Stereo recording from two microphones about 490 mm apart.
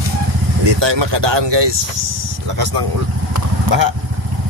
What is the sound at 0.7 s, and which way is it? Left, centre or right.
Speech, right.